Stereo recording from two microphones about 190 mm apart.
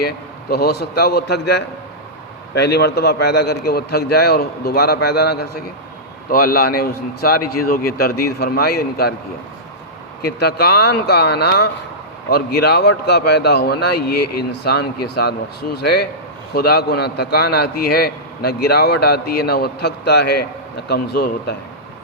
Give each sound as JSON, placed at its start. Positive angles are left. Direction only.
{"t": 0.5, "sound": "a man's voice", "side_deg": 55}
{"t": 10.2, "sound": "a man's voice", "side_deg": 60}